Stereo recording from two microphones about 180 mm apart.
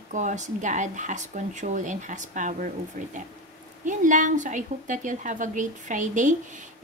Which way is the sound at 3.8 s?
45° right (ahead or behind).